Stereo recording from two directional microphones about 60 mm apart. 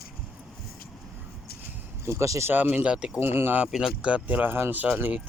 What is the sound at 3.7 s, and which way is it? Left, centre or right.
Speech, centre.